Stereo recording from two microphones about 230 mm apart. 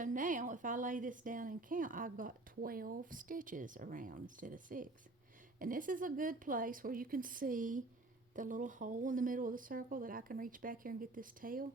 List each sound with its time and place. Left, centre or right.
0.0 s a woman's voice: right